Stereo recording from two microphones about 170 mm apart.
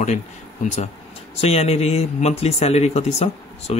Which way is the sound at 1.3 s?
35° left (ahead or behind).